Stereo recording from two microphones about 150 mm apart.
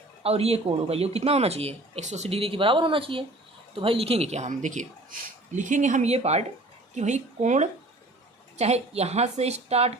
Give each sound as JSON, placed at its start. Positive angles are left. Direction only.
{"t": 0.2, "sound": "speech", "side_deg": -40}